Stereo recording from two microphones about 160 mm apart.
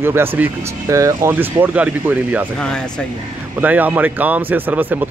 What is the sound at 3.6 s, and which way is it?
A man's voice, 10° right (ahead or behind).